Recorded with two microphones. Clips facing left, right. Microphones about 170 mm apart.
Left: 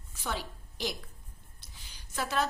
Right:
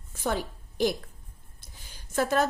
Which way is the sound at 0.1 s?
50° right (ahead or behind).